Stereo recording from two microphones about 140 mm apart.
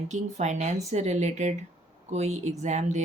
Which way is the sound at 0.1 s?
55° right (ahead or behind).